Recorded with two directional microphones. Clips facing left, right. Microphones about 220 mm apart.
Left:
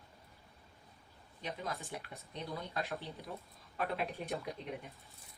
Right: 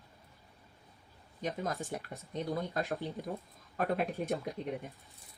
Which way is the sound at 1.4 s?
45° right (ahead or behind).